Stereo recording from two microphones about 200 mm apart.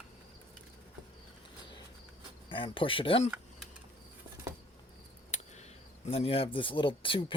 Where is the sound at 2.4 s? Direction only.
25° left (ahead or behind).